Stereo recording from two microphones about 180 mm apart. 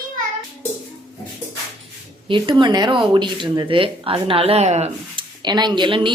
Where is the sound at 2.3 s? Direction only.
25° right (ahead or behind).